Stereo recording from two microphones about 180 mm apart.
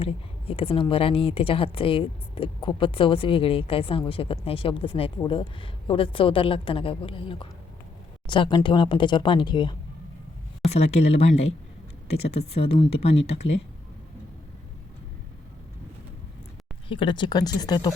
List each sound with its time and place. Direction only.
0.0 s a woman's voice: 30° left (ahead or behind)
16.9 s a woman's voice: 25° left (ahead or behind)